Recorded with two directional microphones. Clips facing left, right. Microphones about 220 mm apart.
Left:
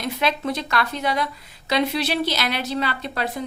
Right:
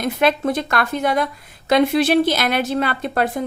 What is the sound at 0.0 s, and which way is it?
A woman's voice, 50° right (ahead or behind).